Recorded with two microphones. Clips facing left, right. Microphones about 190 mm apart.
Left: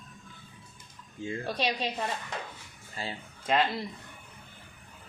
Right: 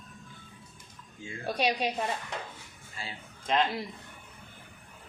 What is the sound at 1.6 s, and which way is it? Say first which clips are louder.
Speech: right 4 dB; 10° right (ahead or behind).